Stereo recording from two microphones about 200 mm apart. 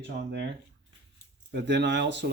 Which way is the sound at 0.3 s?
60° right (ahead or behind).